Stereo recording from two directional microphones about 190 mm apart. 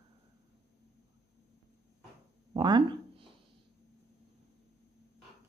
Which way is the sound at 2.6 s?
25° right (ahead or behind).